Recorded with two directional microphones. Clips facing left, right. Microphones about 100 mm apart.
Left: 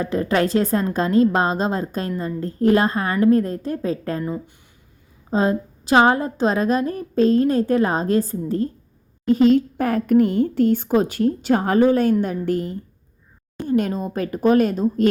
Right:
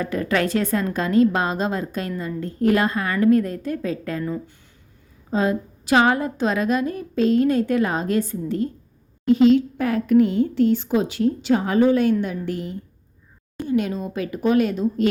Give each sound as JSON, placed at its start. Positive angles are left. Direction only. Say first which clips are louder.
{"t": 0.0, "sound": "a woman's voice", "louder": "left 2 dB", "side_deg": 30}
{"t": 4.2, "sound": "speech", "louder": "even", "side_deg": 20}
{"t": 5.3, "sound": "a woman's voice", "louder": "left 2 dB", "side_deg": 30}